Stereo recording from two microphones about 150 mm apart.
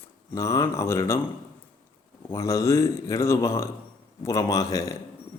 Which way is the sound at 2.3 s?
20° left (ahead or behind).